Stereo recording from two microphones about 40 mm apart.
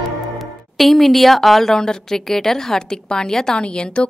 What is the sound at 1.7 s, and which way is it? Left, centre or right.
A woman's voice, centre.